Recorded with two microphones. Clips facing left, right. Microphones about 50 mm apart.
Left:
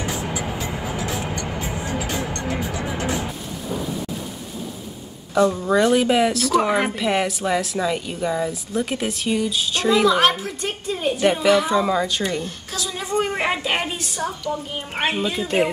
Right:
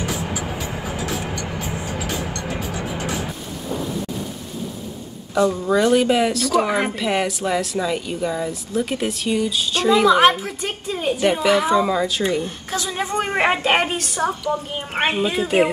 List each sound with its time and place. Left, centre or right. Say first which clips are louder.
5.3 s a woman's voice: even; centre
12.7 s a woman's voice: right 1 dB; right
14.5 s a woman's voice: right 3 dB; centre